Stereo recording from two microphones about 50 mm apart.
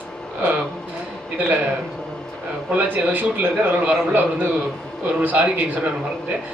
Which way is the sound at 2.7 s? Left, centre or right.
Right.